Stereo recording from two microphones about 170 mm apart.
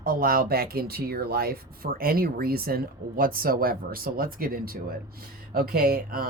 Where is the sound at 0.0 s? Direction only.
60° right (ahead or behind).